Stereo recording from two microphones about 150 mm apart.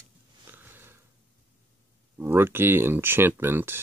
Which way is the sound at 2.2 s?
15° right (ahead or behind).